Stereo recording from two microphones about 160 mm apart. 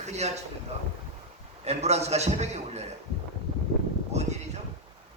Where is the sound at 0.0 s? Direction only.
45° right (ahead or behind).